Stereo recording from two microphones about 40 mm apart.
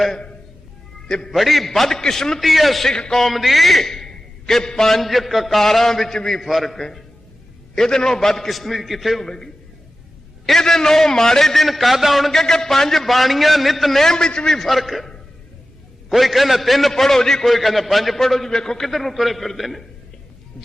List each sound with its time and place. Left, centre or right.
1.0 s a man's voice: centre
1.3 s a man's voice: centre
2.4 s a man's voice: centre
2.9 s a man's voice: centre
3.2 s a man's voice: centre
4.9 s a man's voice: centre
6.4 s a man's voice: centre
9.2 s a man's voice: centre
10.6 s a man's voice: centre
14.0 s a man's voice: centre